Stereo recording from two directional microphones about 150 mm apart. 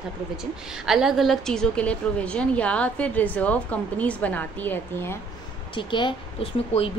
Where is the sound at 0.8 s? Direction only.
5° right (ahead or behind); by 5.2 s 15° left (ahead or behind).